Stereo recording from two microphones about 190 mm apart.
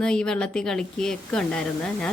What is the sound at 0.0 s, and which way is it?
A woman's voice, 5° left (ahead or behind).